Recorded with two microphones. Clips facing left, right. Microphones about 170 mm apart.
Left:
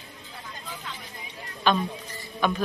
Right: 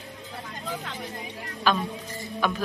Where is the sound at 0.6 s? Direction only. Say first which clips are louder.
Right 7 dB; 65° right (ahead or behind).